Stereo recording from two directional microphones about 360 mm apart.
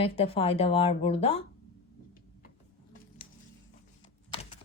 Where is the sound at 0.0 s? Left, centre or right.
Centre.